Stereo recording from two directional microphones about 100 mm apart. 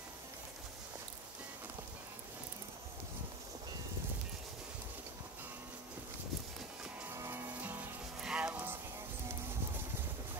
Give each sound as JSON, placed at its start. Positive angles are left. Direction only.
{"t": 7.1, "sound": "music", "side_deg": -25}